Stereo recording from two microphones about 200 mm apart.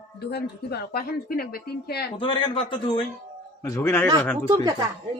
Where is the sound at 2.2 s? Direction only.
25° left (ahead or behind).